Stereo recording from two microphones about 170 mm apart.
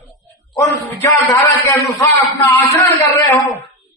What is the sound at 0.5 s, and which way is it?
A man's voice, 15° left (ahead or behind).